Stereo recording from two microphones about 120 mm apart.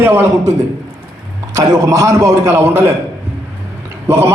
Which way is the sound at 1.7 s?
25° right (ahead or behind).